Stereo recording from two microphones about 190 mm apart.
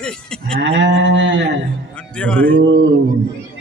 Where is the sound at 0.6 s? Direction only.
70° right (ahead or behind).